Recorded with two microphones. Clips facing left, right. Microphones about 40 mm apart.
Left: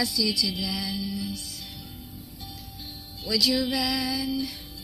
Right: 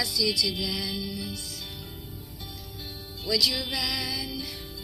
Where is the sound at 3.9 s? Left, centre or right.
Left.